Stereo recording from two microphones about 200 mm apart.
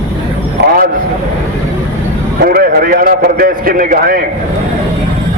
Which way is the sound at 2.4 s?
50° right (ahead or behind).